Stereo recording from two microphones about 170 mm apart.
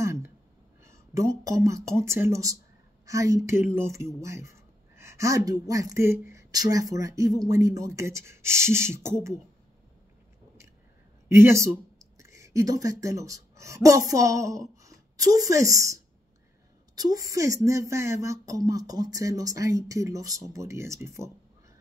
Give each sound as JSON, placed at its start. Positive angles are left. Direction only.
{"t": 0.0, "sound": "a sound", "side_deg": -15}
{"t": 0.8, "sound": "speech", "side_deg": -20}
{"t": 11.2, "sound": "speech", "side_deg": -15}